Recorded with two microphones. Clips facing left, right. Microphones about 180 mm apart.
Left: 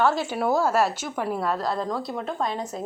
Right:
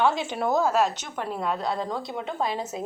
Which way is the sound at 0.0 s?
5° left (ahead or behind).